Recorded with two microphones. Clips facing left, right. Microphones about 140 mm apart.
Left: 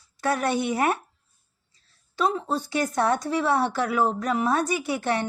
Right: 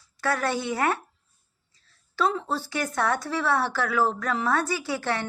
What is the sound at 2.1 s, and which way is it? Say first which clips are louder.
A woman's voice: left 1 dB; 15° left (ahead or behind).